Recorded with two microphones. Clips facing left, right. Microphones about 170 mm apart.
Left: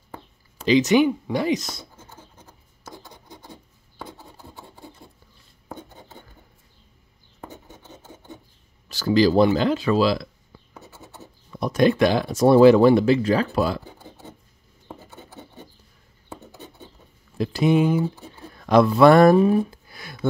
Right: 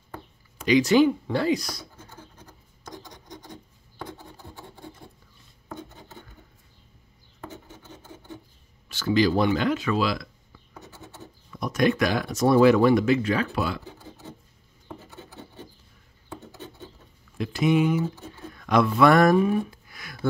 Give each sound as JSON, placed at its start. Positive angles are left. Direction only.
{"t": 0.6, "sound": "speech", "side_deg": 25}
{"t": 8.8, "sound": "speech", "side_deg": 35}
{"t": 11.5, "sound": "speech", "side_deg": 30}
{"t": 16.3, "sound": "rub", "side_deg": 15}
{"t": 17.4, "sound": "speech", "side_deg": 35}